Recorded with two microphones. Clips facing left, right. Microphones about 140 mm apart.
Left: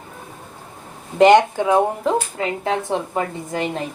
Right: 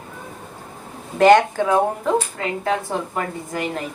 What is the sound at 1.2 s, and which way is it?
Speech, 20° left (ahead or behind).